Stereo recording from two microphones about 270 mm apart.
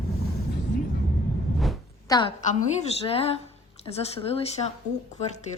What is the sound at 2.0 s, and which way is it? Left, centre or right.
A woman's voice, centre.